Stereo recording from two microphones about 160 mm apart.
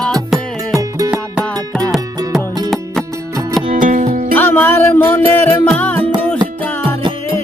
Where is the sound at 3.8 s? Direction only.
55° right (ahead or behind).